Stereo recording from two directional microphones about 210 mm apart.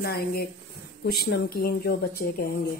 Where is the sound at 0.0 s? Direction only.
45° left (ahead or behind).